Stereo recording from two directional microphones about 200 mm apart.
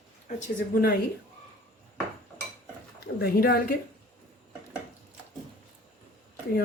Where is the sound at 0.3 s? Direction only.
35° left (ahead or behind).